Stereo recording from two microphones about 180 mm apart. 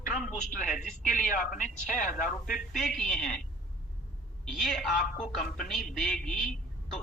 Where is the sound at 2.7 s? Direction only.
Centre (ahead or behind).